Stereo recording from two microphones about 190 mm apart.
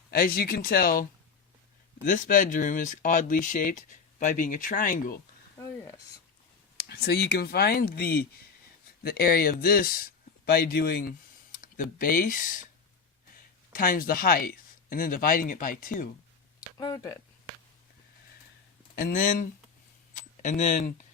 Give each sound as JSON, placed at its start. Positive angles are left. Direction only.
{"t": 0.1, "sound": "speech", "side_deg": 50}
{"t": 2.0, "sound": "speech", "side_deg": 45}
{"t": 6.7, "sound": "speech", "side_deg": 60}
{"t": 13.7, "sound": "speech", "side_deg": 45}
{"t": 16.7, "sound": "speech", "side_deg": 20}
{"t": 18.9, "sound": "speech", "side_deg": 45}